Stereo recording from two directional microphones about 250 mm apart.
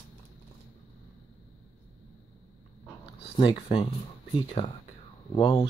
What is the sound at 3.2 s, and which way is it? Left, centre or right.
Speech, left.